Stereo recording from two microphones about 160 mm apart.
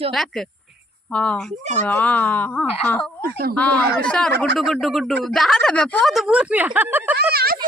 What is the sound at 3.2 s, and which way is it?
Speech, 70° right (ahead or behind).